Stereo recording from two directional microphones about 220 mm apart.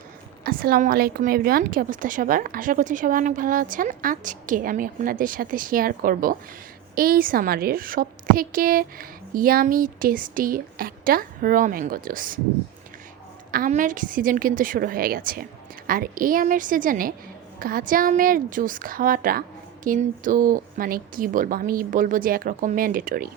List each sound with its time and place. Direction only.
0.4 s a woman's voice: 40° right (ahead or behind)
13.5 s a woman's voice: 40° right (ahead or behind)